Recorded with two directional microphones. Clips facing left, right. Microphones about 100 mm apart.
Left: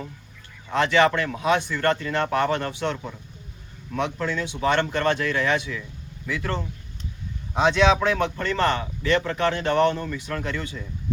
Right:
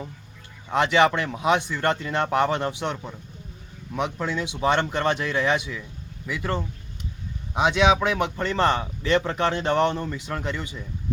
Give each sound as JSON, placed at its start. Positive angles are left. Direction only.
{"t": 0.7, "sound": "speech", "side_deg": -20}